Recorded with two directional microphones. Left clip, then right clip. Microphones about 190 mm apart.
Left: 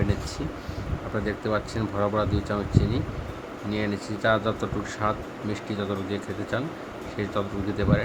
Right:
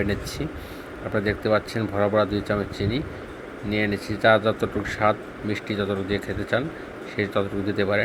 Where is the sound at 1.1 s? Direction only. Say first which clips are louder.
Right 5 dB; 20° right (ahead or behind).